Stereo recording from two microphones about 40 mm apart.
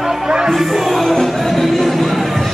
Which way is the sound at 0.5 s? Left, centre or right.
Centre.